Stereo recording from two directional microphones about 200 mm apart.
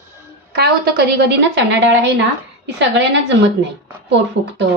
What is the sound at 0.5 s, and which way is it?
A woman's voice, 55° right (ahead or behind).